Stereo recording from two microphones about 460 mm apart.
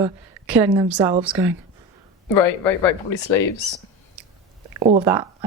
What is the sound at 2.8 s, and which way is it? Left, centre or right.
Speech, left.